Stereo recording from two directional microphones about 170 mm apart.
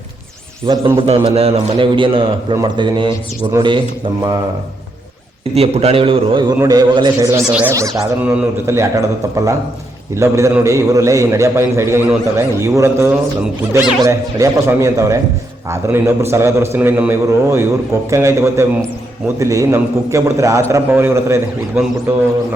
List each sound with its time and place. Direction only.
0.9 s a man's voice: 35° right (ahead or behind)
5.5 s a man's voice: 35° right (ahead or behind); by 22.2 s 10° right (ahead or behind)